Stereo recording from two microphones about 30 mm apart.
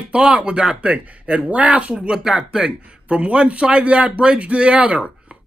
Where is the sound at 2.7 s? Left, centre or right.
Right.